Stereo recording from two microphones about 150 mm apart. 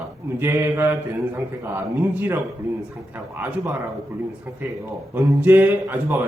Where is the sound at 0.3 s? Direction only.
15° right (ahead or behind).